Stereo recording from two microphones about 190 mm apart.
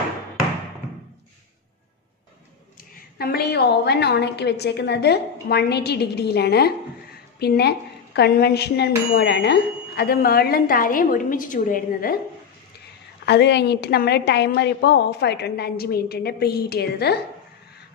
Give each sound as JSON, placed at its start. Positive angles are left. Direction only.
{"t": 2.8, "sound": "speech", "side_deg": 55}
{"t": 13.2, "sound": "speech", "side_deg": 65}